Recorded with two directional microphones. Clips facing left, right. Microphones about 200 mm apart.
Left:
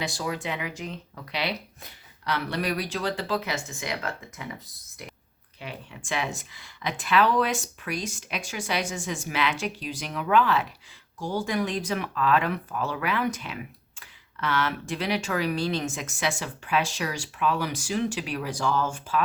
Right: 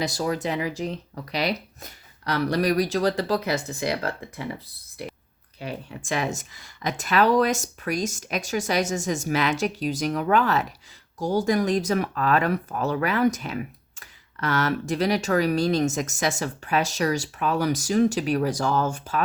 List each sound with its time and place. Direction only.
0.0 s speech: 40° right (ahead or behind)
5.5 s speech: 40° right (ahead or behind)